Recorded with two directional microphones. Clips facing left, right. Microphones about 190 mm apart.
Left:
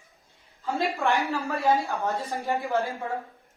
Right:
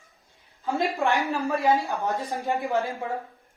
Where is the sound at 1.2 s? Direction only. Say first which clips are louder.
Right 2 dB; 15° right (ahead or behind).